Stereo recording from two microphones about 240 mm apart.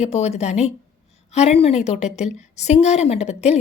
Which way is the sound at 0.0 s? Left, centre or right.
Left.